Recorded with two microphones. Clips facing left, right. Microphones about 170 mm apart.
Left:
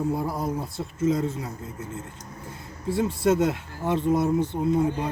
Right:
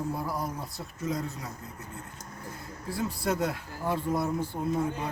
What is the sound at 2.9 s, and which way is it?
A man's voice, 25° left (ahead or behind).